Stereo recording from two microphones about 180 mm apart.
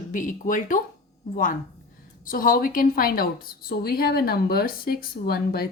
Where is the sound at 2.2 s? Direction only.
50° left (ahead or behind).